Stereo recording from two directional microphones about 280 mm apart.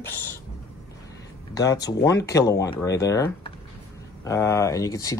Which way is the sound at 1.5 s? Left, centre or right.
Centre.